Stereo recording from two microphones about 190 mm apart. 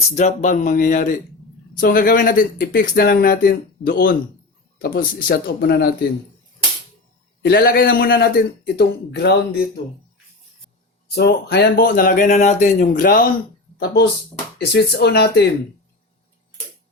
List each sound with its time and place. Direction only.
0.2 s speech: 40° left (ahead or behind); by 6.1 s 55° left (ahead or behind)
7.4 s speech: 55° left (ahead or behind)
11.1 s speech: 55° left (ahead or behind)